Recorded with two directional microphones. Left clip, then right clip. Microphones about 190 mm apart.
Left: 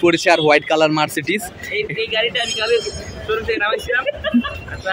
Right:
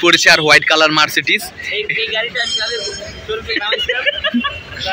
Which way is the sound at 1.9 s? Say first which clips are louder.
Right 1 dB; 25° left (ahead or behind).